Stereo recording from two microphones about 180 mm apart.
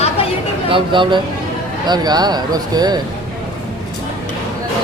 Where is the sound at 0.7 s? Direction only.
25° right (ahead or behind).